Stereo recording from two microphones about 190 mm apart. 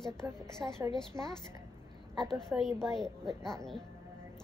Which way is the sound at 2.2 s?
Centre (ahead or behind).